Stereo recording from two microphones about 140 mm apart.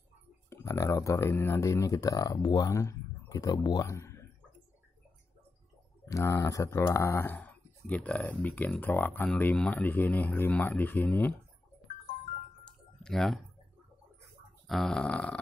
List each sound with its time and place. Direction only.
0.5 s speech: 20° left (ahead or behind)
6.0 s speech: 20° left (ahead or behind)
12.6 s typing: 5° left (ahead or behind)
14.7 s burping: centre (ahead or behind)